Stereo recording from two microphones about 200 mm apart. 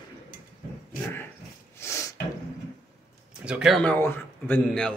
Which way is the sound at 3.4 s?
5° right (ahead or behind).